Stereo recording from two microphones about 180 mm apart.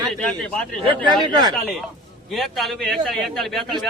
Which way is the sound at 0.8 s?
25° right (ahead or behind).